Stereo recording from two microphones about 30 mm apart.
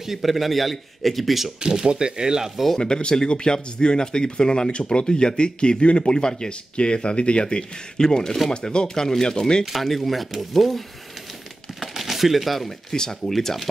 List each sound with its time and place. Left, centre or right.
0.0 s a man's voice: centre
1.9 s speech: right
2.8 s speech: left
8.8 s speech: centre
9.8 s a man's voice: centre
11.8 s a sound: centre
12.9 s speech: left
13.3 s speech: centre